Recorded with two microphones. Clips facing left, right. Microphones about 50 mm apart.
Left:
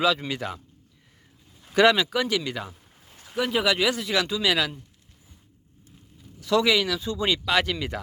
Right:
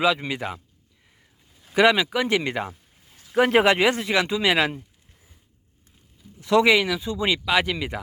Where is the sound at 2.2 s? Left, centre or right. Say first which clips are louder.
Right 4 dB; right.